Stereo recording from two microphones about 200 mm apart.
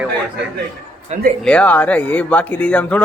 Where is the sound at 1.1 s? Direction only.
40° right (ahead or behind).